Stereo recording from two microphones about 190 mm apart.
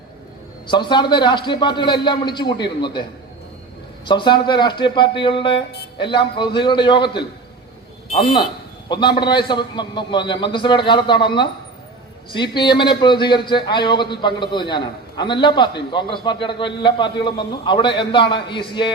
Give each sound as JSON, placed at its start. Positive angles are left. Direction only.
{"t": 0.7, "sound": "a man's voice", "side_deg": 25}